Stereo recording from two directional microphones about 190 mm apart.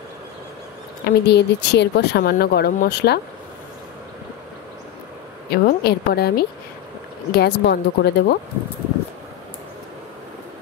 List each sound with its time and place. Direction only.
1.0 s speech: 60° left (ahead or behind)
5.5 s speech: 55° left (ahead or behind)